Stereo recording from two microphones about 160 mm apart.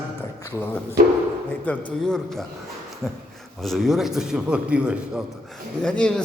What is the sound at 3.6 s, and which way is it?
A man's voice, centre (ahead or behind).